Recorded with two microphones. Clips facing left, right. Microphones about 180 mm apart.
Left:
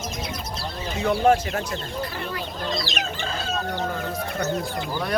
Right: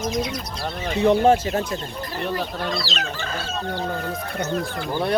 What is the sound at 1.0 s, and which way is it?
Speech, 25° right (ahead or behind).